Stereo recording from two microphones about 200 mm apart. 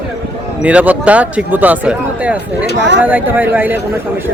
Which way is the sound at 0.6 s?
5° right (ahead or behind).